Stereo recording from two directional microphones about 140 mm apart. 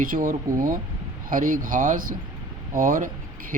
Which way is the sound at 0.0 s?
75° right (ahead or behind).